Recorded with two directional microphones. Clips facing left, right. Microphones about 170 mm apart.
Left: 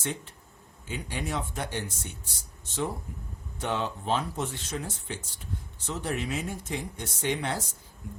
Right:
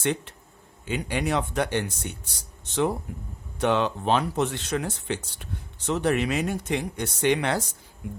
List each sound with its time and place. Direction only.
0.0 s speech: 70° right (ahead or behind)